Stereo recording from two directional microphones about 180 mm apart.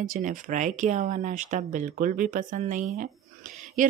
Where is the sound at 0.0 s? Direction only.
50° right (ahead or behind).